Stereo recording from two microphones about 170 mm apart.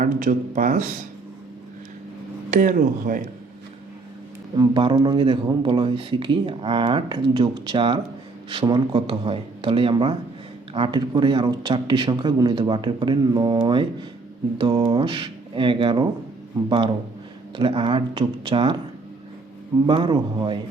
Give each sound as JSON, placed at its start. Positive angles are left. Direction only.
{"t": 0.0, "sound": "speech", "side_deg": -50}
{"t": 2.5, "sound": "speech", "side_deg": -50}
{"t": 4.5, "sound": "speech", "side_deg": -25}
{"t": 19.9, "sound": "speech", "side_deg": -30}